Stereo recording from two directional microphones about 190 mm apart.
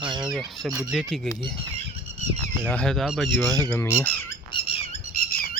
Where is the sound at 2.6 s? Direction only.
5° left (ahead or behind).